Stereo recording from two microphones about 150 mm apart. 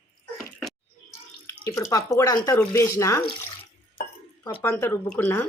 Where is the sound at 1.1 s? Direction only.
15° left (ahead or behind).